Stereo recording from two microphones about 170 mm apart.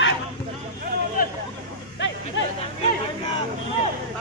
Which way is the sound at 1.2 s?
60° left (ahead or behind).